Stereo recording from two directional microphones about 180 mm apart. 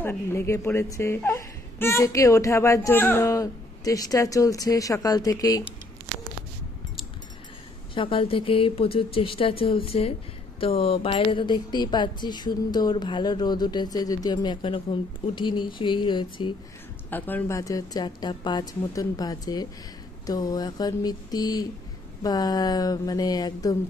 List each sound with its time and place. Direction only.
0.0 s speech: 10° left (ahead or behind)
7.9 s speech: 30° left (ahead or behind)
17.1 s speech: 15° left (ahead or behind)